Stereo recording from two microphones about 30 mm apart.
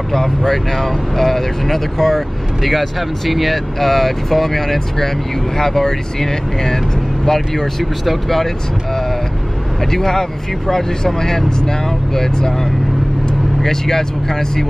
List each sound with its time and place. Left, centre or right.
0.1 s speech: centre
3.3 s speech: centre
8.0 s speech: centre
9.8 s speech: centre
13.6 s speech: centre